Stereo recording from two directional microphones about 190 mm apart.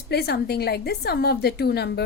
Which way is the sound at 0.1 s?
55° left (ahead or behind).